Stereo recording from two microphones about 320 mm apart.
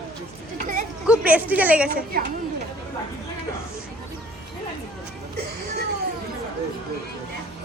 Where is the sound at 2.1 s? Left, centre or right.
Right.